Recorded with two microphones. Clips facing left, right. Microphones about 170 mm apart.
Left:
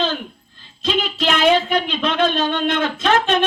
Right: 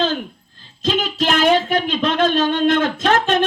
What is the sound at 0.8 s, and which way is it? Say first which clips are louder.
Speech: right 2 dB; 45° right (ahead or behind).